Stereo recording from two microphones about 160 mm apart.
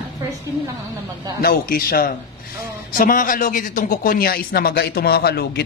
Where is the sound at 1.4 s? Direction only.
65° left (ahead or behind).